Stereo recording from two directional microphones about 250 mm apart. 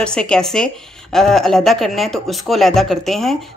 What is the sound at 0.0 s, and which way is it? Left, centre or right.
Speech, centre.